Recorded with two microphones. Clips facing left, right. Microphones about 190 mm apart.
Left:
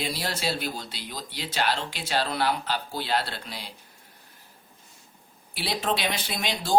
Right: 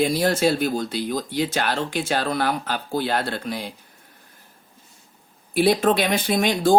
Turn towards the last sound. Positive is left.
turn(degrees=-50)  # may be behind; listen again after turning